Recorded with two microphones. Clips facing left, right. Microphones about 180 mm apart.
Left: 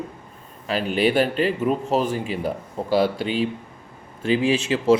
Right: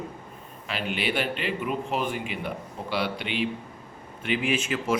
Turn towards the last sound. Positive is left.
turn(degrees=30)  # may be behind; listen again after turning